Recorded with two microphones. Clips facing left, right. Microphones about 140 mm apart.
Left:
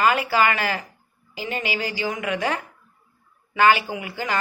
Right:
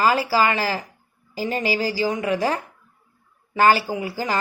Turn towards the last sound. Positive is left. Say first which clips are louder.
# right 3 dB
turn(degrees=-35)  # may be behind; listen again after turning